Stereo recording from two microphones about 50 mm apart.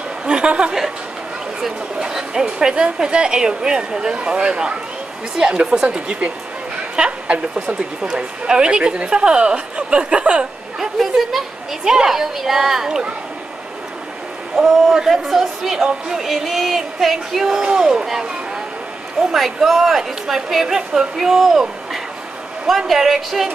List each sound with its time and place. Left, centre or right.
0.2 s chuckle: centre
1.6 s speech: centre
10.8 s speech: centre
14.6 s speech: centre